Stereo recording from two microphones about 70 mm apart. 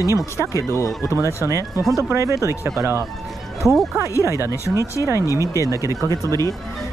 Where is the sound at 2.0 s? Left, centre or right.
Right.